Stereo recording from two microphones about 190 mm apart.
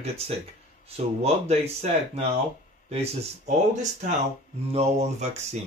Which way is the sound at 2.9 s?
35° right (ahead or behind).